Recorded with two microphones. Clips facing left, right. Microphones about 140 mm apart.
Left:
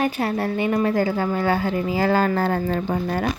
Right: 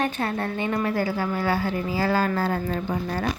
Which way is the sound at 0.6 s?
20° left (ahead or behind).